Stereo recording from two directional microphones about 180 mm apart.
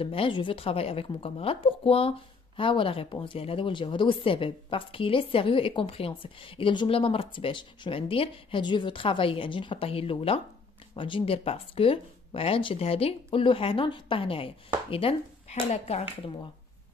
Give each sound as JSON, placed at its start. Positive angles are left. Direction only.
{"t": 0.0, "sound": "a woman's voice", "side_deg": 30}